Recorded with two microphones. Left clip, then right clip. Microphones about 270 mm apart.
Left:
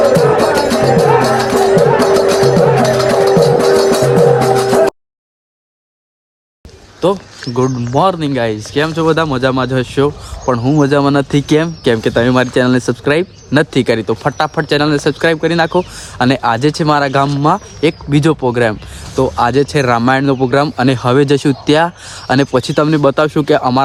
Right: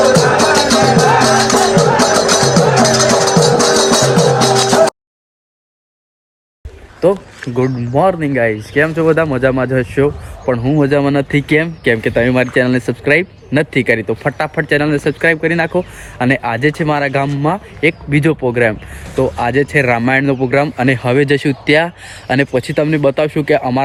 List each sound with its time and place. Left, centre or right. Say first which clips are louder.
0.2 s music: even; right
7.0 s speech: right 1 dB; centre